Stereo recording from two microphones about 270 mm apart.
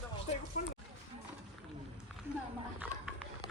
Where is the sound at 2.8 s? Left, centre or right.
Centre.